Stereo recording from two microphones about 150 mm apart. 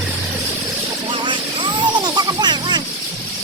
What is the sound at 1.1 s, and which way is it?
Vehicle, 30° right (ahead or behind).